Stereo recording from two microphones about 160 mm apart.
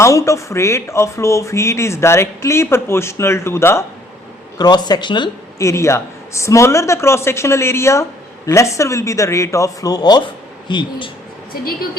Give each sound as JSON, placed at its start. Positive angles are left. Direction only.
{"t": 0.0, "sound": "speech", "side_deg": 20}
{"t": 5.6, "sound": "speech", "side_deg": 20}